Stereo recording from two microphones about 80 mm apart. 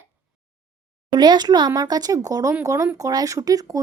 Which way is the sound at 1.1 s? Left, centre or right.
Right.